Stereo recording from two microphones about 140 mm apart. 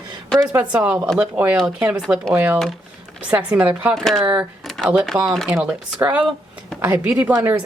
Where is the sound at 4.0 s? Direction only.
Centre (ahead or behind).